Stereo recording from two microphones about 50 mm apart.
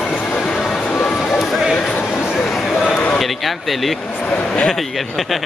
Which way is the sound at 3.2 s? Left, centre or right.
Centre.